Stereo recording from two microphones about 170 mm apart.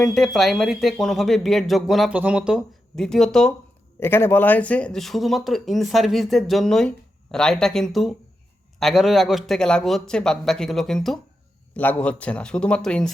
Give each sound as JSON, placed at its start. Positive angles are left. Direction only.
{"t": 0.0, "sound": "speech", "side_deg": 0}
{"t": 4.0, "sound": "speech", "side_deg": 15}